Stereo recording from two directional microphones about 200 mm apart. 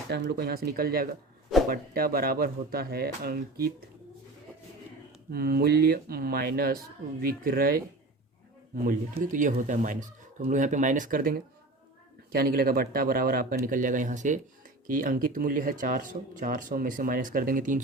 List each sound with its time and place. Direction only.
0.1 s speech: 55° right (ahead or behind)
5.3 s speech: 50° right (ahead or behind)